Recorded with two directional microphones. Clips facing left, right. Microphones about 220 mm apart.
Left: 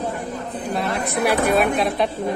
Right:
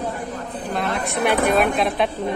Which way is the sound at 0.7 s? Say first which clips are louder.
Even; centre (ahead or behind).